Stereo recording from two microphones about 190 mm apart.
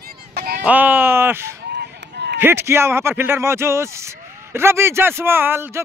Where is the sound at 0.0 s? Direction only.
55° right (ahead or behind).